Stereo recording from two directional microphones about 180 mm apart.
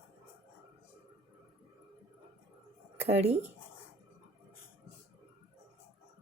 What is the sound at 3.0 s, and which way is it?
Speech, 35° right (ahead or behind).